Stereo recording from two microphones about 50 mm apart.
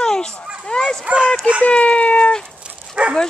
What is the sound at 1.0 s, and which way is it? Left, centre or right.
Speech, right.